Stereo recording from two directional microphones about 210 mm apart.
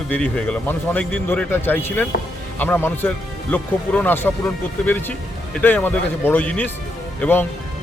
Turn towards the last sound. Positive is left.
turn(degrees=10)  # may be behind; listen again after turning